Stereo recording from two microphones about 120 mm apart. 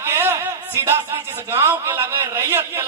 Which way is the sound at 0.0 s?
20° right (ahead or behind).